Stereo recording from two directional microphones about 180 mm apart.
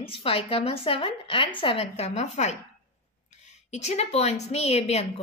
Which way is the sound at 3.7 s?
40° left (ahead or behind).